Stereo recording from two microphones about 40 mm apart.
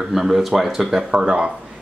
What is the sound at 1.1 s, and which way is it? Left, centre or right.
Speech, right.